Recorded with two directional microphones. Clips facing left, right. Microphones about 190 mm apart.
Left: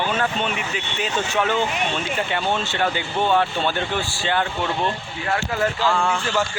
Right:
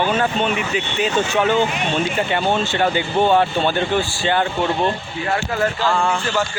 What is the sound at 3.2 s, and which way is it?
Speech, 35° right (ahead or behind).